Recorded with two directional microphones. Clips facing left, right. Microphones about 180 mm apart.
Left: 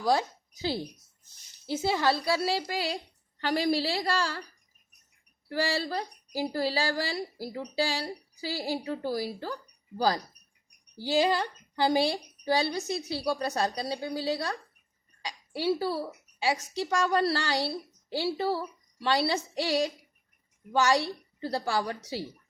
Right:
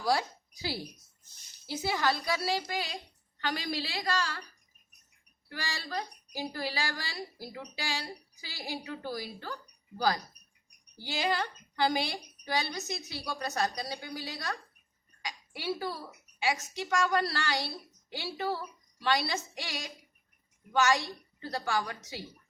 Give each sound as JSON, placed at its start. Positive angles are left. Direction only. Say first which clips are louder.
{"t": 0.0, "sound": "a woman's voice", "louder": "left 3 dB", "side_deg": 20}
{"t": 4.0, "sound": "a woman's voice", "louder": "left 3 dB", "side_deg": 35}
{"t": 5.5, "sound": "a woman's voice", "louder": "left 10 dB", "side_deg": 35}
{"t": 11.0, "sound": "a woman's voice", "louder": "left 6 dB", "side_deg": 35}